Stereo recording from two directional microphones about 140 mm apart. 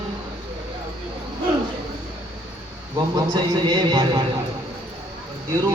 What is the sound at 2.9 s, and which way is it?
A man's voice, 30° right (ahead or behind).